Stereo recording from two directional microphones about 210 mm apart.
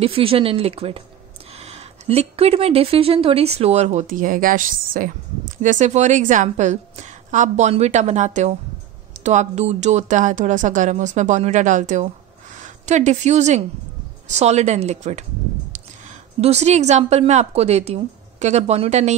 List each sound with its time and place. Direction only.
0.0 s a woman's voice: 25° right (ahead or behind)